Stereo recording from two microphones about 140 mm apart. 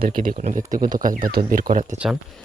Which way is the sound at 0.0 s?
85° right.